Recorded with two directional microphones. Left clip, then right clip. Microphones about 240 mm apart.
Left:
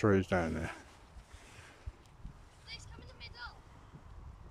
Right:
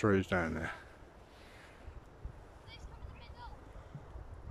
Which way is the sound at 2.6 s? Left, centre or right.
Left.